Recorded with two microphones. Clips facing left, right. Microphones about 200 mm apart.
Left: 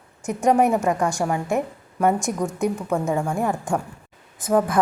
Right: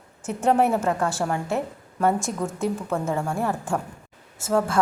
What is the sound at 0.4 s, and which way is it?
A woman's voice, 10° left (ahead or behind).